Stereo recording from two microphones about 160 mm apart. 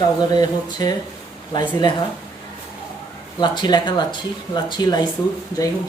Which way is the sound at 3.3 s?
25° left (ahead or behind).